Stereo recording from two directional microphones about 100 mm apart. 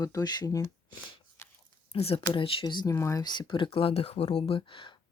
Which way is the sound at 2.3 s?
60° left (ahead or behind).